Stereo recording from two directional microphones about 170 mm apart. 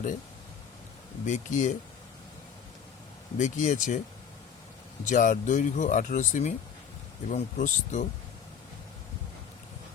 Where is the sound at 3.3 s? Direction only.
45° left (ahead or behind).